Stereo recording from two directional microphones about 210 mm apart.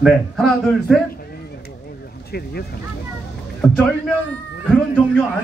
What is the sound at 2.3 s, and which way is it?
Speech, 50° left (ahead or behind).